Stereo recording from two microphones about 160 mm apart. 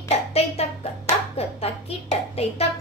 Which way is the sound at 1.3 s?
40° left (ahead or behind).